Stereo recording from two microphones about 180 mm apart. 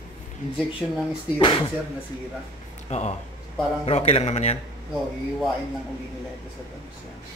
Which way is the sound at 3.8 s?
35° left (ahead or behind).